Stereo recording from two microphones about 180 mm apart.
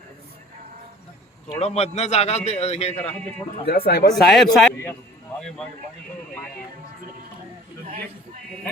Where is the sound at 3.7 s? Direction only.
60° left (ahead or behind).